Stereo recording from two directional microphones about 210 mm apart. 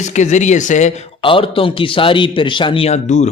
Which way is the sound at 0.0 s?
35° left (ahead or behind).